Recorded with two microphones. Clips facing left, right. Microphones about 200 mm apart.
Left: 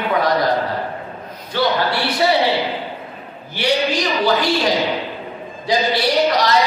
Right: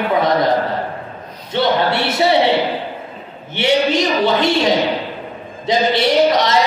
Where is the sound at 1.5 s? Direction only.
25° right (ahead or behind).